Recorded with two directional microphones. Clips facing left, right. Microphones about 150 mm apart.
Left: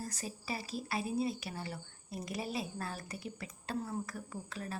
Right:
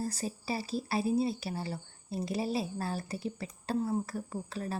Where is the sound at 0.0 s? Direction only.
30° right (ahead or behind).